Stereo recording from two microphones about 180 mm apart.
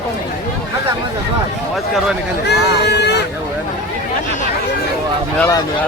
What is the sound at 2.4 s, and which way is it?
Speech, 70° left (ahead or behind).